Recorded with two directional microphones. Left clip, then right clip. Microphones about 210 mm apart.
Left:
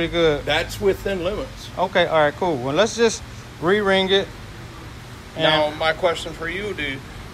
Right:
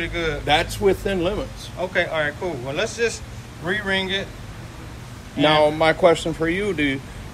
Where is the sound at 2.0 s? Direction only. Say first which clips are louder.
Left 5 dB; 20° left (ahead or behind).